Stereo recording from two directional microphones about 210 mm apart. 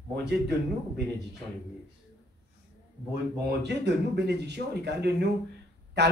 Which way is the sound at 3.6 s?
55° right (ahead or behind).